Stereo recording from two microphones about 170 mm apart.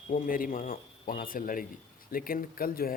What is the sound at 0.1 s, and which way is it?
Speech, 55° left (ahead or behind).